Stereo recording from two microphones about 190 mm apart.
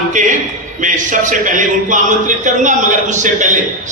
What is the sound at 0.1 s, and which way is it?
A man's voice, 40° right (ahead or behind).